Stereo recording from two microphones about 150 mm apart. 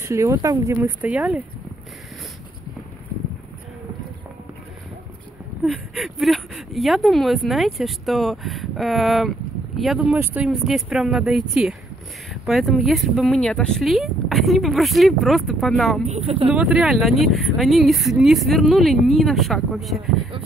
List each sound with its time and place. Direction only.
0.0 s speech: 20° right (ahead or behind)
1.0 s speech: 10° right (ahead or behind)
5.6 s speech: centre (ahead or behind)
16.1 s speech: 40° right (ahead or behind)
16.4 s speech: 5° right (ahead or behind)